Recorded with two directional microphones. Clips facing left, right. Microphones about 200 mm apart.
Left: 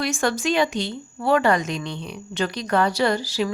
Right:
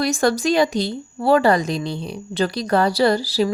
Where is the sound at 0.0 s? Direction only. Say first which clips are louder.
Right 5 dB; 40° right (ahead or behind).